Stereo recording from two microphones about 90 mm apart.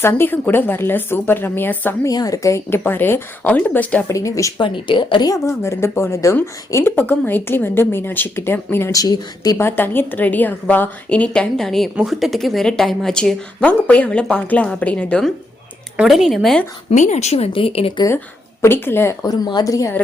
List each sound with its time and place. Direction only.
0.0 s a woman's voice: 25° left (ahead or behind)
2.0 s a woman's voice: 40° left (ahead or behind); by 4.0 s 15° left (ahead or behind)
4.1 s speech: 35° left (ahead or behind)
4.6 s speech: 65° left (ahead or behind)
5.2 s a woman's voice: 40° left (ahead or behind)
8.9 s speech: 45° left (ahead or behind)
9.6 s a woman's voice: 25° left (ahead or behind)
16.0 s speech: 5° right (ahead or behind)
16.9 s speech: 90° left
18.6 s a woman's voice: 25° left (ahead or behind)
19.2 s speech: 50° left (ahead or behind)